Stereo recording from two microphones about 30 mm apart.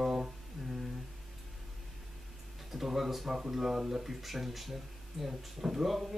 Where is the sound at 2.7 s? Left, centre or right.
Centre.